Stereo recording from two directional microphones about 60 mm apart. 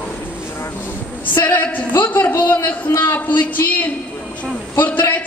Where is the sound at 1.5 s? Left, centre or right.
Left.